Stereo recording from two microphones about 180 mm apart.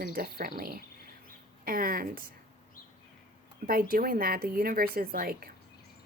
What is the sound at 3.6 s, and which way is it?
A woman's voice, 55° right (ahead or behind).